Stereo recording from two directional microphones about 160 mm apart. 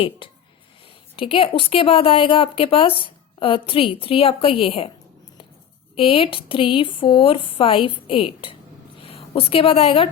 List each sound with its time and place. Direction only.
0.2 s a woman's voice: 30° left (ahead or behind)
6.0 s a woman's voice: 35° left (ahead or behind)